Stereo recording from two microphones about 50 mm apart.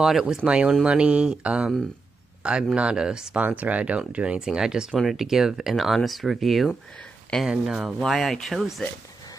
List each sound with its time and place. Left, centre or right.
0.0 s speech: centre
0.5 s speech: right
3.3 s speech: right
4.4 s speech: centre
7.4 s speech: centre
8.0 s speech: centre